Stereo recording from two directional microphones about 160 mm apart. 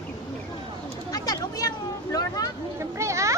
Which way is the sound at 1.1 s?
20° left (ahead or behind).